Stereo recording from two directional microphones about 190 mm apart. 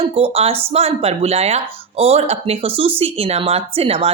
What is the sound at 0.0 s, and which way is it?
A woman's voice, 30° right (ahead or behind).